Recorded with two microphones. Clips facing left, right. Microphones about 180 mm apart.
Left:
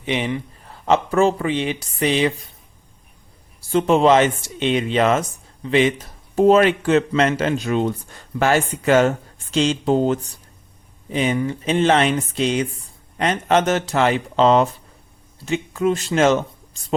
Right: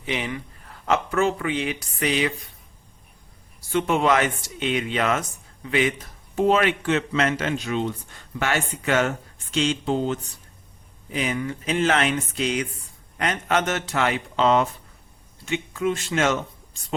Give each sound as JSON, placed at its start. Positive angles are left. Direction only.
{"t": 0.0, "sound": "speech", "side_deg": 20}
{"t": 3.7, "sound": "speech", "side_deg": 30}
{"t": 6.3, "sound": "speech", "side_deg": 40}
{"t": 11.1, "sound": "speech", "side_deg": 30}